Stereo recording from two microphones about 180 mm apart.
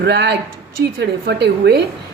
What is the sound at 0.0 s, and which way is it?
A woman's voice, 70° right (ahead or behind).